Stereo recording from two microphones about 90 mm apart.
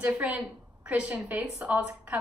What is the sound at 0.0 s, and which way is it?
A woman's voice, 15° right (ahead or behind).